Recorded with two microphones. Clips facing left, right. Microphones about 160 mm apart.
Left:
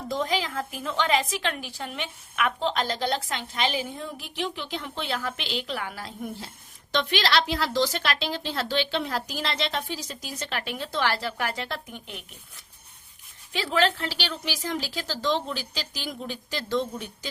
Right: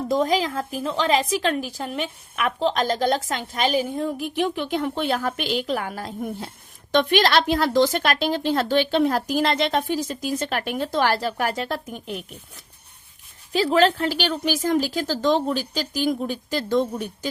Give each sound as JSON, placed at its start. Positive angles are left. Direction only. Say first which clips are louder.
{"t": 0.1, "sound": "a woman's voice", "louder": "right 6 dB", "side_deg": -40}
{"t": 13.5, "sound": "a woman's voice", "louder": "right 6 dB", "side_deg": -40}